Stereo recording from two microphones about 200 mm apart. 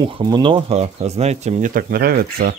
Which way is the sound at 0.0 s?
20° right (ahead or behind).